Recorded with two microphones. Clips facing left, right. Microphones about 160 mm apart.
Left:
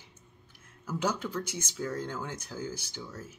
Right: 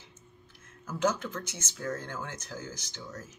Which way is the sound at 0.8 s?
10° left (ahead or behind).